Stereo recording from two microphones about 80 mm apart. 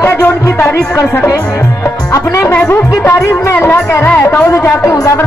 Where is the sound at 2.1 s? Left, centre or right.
Left.